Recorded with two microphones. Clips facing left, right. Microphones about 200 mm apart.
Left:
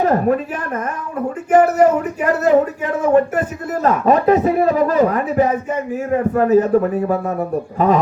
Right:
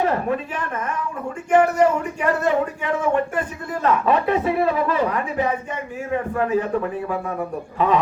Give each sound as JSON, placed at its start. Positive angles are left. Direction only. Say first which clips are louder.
{"t": 0.0, "sound": "speech", "louder": "left 6 dB", "side_deg": 40}
{"t": 1.5, "sound": "speech", "louder": "left 4 dB", "side_deg": 40}